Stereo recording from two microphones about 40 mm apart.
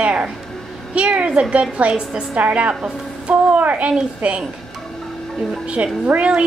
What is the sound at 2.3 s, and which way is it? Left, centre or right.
A woman's voice, right.